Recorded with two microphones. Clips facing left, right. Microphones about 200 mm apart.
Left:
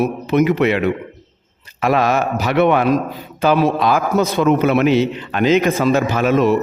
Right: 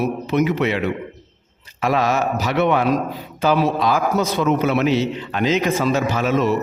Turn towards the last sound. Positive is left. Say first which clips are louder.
# left 4 dB
turn(degrees=55)  # may be behind; listen again after turning